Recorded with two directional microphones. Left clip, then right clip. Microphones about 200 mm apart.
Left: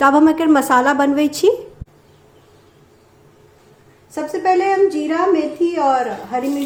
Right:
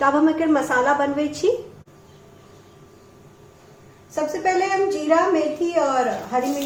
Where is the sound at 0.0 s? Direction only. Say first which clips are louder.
Left 6 dB; 50° left (ahead or behind).